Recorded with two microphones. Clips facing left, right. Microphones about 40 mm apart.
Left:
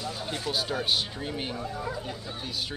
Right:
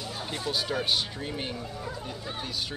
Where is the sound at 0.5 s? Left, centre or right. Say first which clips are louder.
Even; centre.